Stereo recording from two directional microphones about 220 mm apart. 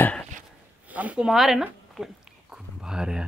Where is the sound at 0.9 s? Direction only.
5° right (ahead or behind).